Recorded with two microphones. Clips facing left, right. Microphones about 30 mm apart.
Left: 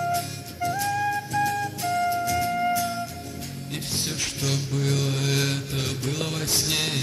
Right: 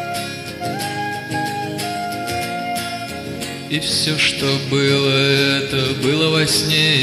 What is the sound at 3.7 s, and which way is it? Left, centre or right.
Mantra, right.